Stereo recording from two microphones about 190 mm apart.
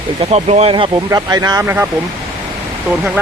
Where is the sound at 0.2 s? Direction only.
35° right (ahead or behind); by 1.9 s 10° right (ahead or behind).